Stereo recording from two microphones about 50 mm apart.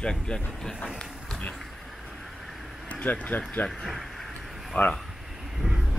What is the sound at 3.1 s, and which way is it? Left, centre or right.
Speech, left.